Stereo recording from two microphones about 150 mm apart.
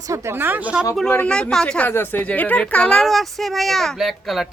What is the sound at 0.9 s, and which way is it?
Speech, 5° left (ahead or behind).